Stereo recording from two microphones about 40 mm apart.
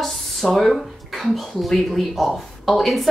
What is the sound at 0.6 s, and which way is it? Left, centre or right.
Speech, centre.